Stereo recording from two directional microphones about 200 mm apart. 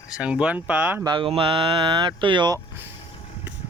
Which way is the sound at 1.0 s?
25° right (ahead or behind).